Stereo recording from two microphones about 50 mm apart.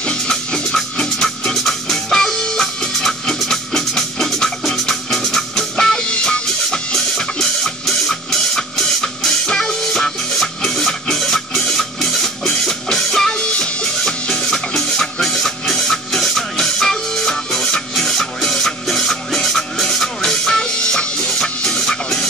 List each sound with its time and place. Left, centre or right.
0.0 s music: centre